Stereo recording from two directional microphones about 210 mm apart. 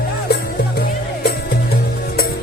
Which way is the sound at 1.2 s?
50° left (ahead or behind).